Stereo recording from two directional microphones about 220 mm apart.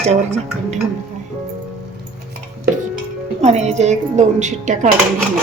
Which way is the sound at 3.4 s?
30° right (ahead or behind).